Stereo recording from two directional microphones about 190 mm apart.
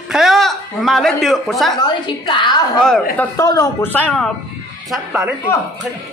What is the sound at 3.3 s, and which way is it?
A man's voice, 15° left (ahead or behind).